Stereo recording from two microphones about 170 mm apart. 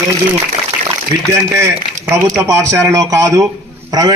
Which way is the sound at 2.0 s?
15° right (ahead or behind).